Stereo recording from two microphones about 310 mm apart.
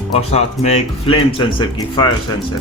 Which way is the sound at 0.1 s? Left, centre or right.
Left.